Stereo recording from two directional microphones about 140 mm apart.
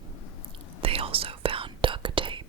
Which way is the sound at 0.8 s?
40° right (ahead or behind).